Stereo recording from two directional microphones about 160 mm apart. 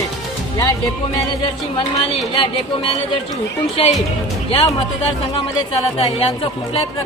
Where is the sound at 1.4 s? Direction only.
35° left (ahead or behind).